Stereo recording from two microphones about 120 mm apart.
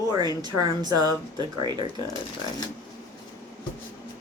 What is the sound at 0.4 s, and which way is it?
Speech, 35° right (ahead or behind).